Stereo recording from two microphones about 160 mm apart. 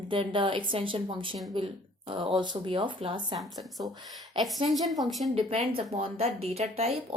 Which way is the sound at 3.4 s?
Centre (ahead or behind).